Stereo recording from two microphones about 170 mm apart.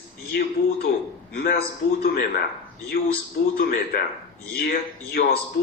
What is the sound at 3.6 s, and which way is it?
Speech, 65° left (ahead or behind).